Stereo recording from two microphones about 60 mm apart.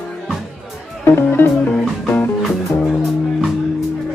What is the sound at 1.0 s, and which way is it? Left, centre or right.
Music, left.